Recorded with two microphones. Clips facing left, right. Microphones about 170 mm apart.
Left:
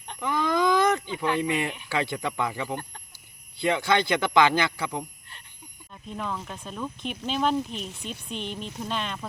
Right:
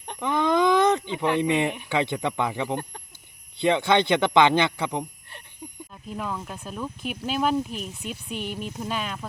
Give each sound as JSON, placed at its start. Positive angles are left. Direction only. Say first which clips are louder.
{"t": 0.2, "sound": "a sound", "louder": "right 3 dB", "side_deg": -20}
{"t": 1.9, "sound": "speech", "louder": "right 3 dB", "side_deg": -20}
{"t": 5.9, "sound": "speech", "louder": "right 1 dB", "side_deg": -5}